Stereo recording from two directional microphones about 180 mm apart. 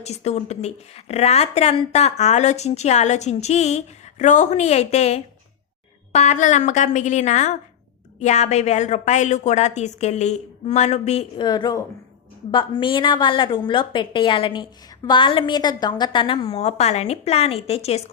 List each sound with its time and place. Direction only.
0.0 s a woman's voice: 35° left (ahead or behind)
11.4 s a woman's voice: 20° left (ahead or behind)